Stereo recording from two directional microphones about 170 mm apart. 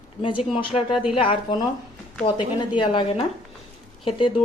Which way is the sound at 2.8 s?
30° left (ahead or behind).